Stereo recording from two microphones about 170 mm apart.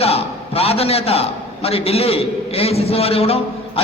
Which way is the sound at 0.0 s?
35° left (ahead or behind).